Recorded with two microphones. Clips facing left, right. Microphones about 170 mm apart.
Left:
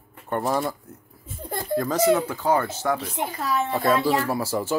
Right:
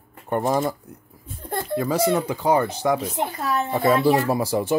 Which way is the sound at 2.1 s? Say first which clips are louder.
Right 2 dB; 15° right (ahead or behind).